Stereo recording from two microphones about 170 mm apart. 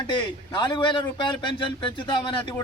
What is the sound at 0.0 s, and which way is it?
A man's voice, 25° left (ahead or behind).